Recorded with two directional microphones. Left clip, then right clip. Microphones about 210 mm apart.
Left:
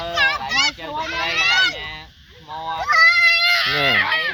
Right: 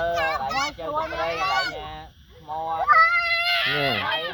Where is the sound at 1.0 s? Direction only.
15° left (ahead or behind).